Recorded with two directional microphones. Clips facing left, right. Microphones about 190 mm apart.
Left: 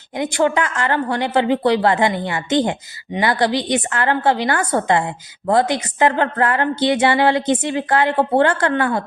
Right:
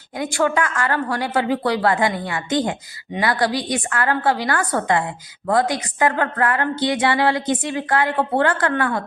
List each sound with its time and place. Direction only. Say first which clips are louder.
0.2 s a woman's voice: left 2 dB; 20° left (ahead or behind)